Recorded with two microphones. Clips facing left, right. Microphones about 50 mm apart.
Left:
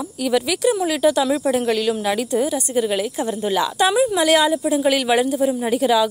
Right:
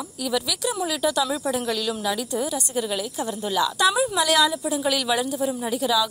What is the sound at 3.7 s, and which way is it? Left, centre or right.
A woman's voice, left.